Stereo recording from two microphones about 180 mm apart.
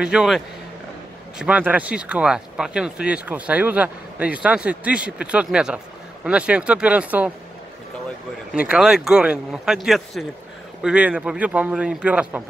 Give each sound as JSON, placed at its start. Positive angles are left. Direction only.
{"t": 0.0, "sound": "speech", "side_deg": -5}
{"t": 1.4, "sound": "speech", "side_deg": -10}
{"t": 8.5, "sound": "speech", "side_deg": -5}